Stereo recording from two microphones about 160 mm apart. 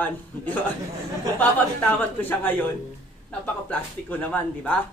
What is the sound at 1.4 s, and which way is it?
Speech, 10° left (ahead or behind).